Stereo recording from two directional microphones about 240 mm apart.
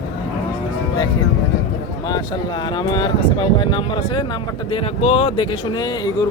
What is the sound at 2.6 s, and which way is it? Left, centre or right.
Speech, centre.